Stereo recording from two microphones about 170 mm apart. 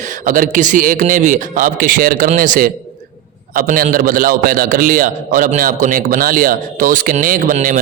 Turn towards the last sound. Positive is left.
turn(degrees=-50)  # may be behind; listen again after turning